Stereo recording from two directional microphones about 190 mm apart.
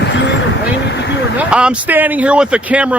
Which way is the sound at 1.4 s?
5° right (ahead or behind).